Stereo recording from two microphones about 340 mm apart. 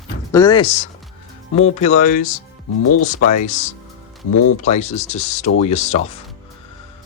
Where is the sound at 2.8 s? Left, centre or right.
Left.